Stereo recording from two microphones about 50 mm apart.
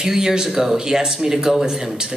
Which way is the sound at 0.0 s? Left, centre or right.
Centre.